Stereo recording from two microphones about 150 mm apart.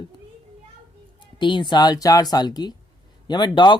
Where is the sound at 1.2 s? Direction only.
30° left (ahead or behind).